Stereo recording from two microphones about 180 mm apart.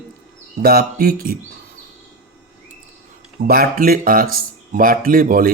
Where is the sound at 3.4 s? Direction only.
55° right (ahead or behind).